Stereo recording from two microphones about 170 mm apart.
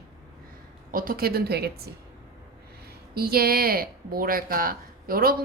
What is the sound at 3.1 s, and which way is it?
Speech, 65° right (ahead or behind).